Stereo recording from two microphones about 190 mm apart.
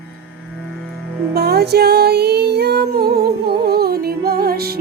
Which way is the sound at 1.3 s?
55° right (ahead or behind).